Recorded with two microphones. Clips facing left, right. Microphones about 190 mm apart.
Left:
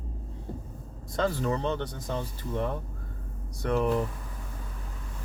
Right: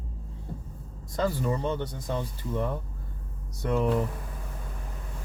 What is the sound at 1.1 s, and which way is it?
Speech, 10° right (ahead or behind).